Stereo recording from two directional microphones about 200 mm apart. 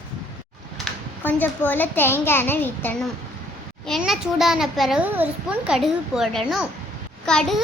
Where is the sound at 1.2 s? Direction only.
10° left (ahead or behind).